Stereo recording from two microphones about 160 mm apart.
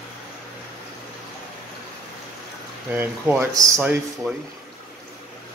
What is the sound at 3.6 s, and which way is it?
Speech, 15° right (ahead or behind).